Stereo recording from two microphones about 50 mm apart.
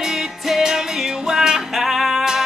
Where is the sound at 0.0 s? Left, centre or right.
Centre.